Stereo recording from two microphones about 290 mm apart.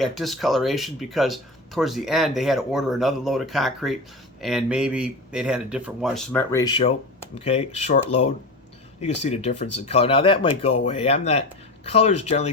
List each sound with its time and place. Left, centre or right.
0.0 s speech: centre; by 12.5 s left